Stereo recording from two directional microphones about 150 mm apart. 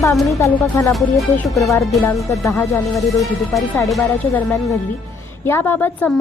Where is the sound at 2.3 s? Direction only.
20° left (ahead or behind).